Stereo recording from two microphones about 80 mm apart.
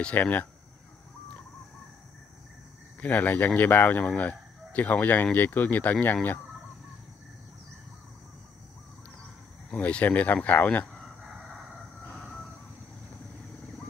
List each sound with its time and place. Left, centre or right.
0.0 s speech: centre
3.0 s speech: left
9.8 s speech: centre
11.2 s crowing: centre
12.1 s fowl: centre